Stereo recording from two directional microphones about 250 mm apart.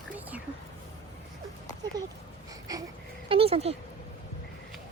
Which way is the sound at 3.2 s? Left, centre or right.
Right.